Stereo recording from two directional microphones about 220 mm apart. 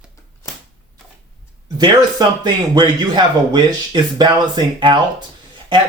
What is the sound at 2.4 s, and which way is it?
Speech, 20° right (ahead or behind).